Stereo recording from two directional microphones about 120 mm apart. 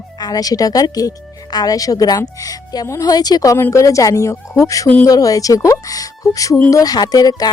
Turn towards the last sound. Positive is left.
turn(degrees=35)  # may be behind; listen again after turning